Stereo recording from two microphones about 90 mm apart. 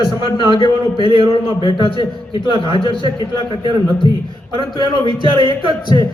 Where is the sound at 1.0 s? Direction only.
60° right (ahead or behind).